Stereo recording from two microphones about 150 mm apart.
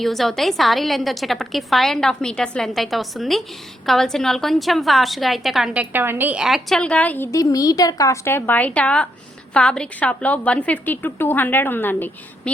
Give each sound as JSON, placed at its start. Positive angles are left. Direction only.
{"t": 0.0, "sound": "a woman's voice", "side_deg": 0}
{"t": 7.3, "sound": "a woman's voice", "side_deg": 25}